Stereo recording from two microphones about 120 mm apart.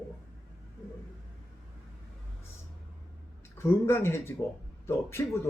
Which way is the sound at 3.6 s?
20° left (ahead or behind).